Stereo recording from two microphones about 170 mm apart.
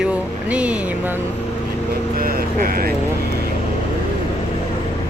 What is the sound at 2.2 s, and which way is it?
Vehicle, 60° right (ahead or behind).